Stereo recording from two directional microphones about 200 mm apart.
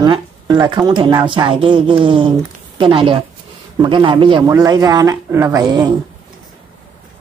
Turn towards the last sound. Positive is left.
turn(degrees=-20)  # may be behind; listen again after turning